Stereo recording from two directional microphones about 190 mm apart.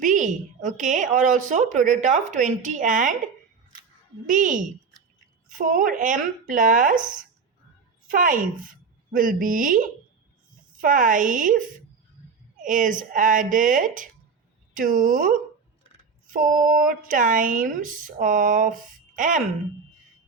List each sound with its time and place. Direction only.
0.0 s a woman's voice: 40° right (ahead or behind)
4.3 s a woman's voice: 45° right (ahead or behind)